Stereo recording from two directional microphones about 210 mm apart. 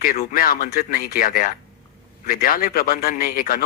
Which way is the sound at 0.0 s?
45° left (ahead or behind).